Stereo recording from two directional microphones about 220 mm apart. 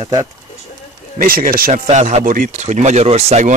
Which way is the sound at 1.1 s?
40° right (ahead or behind).